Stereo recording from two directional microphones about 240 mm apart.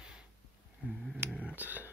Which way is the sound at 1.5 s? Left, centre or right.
Centre.